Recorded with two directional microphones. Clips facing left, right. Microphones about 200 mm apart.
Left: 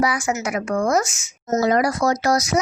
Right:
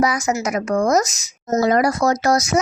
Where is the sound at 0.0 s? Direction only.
40° right (ahead or behind).